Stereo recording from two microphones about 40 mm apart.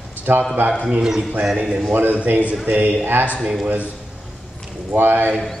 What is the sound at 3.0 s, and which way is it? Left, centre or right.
Speech, right.